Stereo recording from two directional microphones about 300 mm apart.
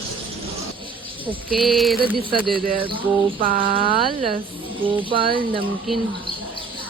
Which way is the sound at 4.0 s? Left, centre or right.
Centre.